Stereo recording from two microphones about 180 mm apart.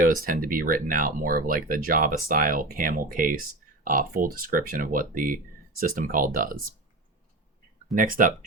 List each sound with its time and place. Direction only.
0.0 s speech: 50° right (ahead or behind)
7.9 s speech: 50° right (ahead or behind)